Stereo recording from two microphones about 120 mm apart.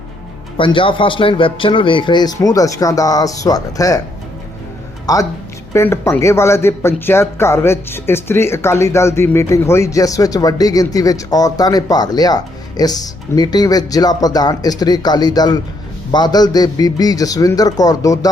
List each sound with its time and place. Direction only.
0.5 s a man's voice: 45° left (ahead or behind)
5.1 s a man's voice: 30° left (ahead or behind)